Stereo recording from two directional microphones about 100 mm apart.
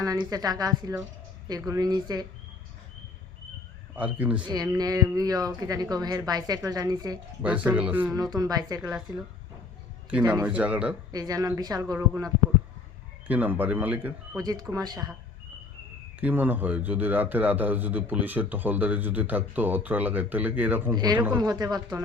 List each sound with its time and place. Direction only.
0.2 s a woman's voice: 40° right (ahead or behind)
3.9 s a man's voice: 15° right (ahead or behind)
4.4 s a woman's voice: 40° right (ahead or behind)
7.4 s a man's voice: 15° right (ahead or behind)
8.1 s a woman's voice: 40° right (ahead or behind)
10.4 s a man's voice: 10° right (ahead or behind)
11.1 s a woman's voice: 40° right (ahead or behind)
13.2 s a man's voice: 15° right (ahead or behind)
14.3 s a woman's voice: 40° right (ahead or behind)
16.2 s a man's voice: 15° right (ahead or behind)
20.9 s speech: 45° right (ahead or behind)
21.2 s speech: 20° right (ahead or behind)
21.4 s a woman's voice: 40° right (ahead or behind)